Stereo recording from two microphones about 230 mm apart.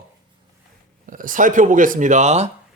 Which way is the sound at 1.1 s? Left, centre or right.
Right.